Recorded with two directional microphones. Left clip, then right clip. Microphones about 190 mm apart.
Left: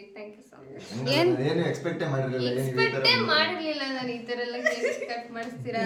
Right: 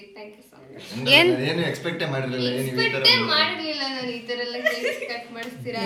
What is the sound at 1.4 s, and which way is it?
Speech, 40° left (ahead or behind).